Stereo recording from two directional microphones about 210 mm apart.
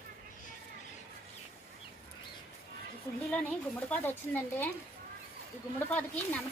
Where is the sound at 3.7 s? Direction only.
10° left (ahead or behind).